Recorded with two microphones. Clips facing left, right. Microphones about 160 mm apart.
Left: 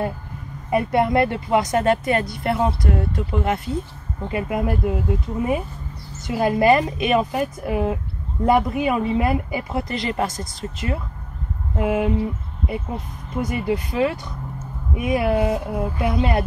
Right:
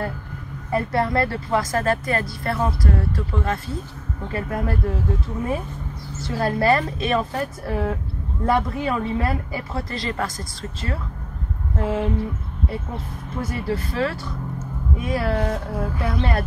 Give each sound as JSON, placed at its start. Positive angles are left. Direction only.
{"t": 0.7, "sound": "a woman's voice", "side_deg": 20}
{"t": 6.2, "sound": "a woman's voice", "side_deg": 15}